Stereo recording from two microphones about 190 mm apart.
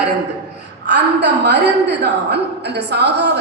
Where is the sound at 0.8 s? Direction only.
65° right (ahead or behind).